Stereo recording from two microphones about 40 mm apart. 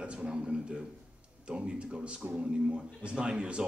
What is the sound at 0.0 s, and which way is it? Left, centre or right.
A man's voice, right.